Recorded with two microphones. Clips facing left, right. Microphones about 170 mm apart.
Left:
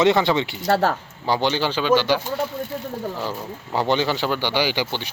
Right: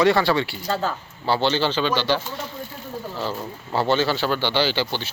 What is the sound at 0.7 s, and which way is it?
Speech, 70° left (ahead or behind).